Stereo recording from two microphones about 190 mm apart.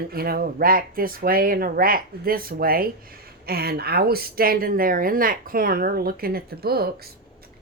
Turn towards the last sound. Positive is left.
turn(degrees=-55)  # may be behind; listen again after turning